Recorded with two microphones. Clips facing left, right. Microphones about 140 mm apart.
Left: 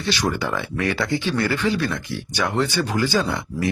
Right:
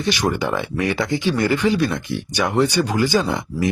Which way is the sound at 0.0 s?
15° right (ahead or behind).